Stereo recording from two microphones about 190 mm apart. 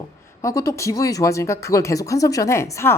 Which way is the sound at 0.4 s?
15° left (ahead or behind).